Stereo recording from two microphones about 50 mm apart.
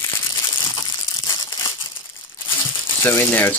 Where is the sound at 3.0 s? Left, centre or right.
Left.